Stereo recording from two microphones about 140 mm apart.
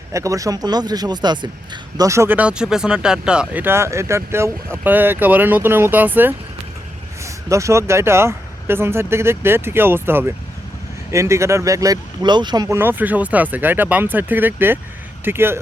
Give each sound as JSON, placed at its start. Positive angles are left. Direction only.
{"t": 0.1, "sound": "speech", "side_deg": -25}
{"t": 2.0, "sound": "speech", "side_deg": -20}
{"t": 12.6, "sound": "speech", "side_deg": -15}